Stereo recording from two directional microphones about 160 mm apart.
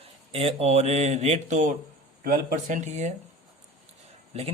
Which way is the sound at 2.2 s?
65° right (ahead or behind).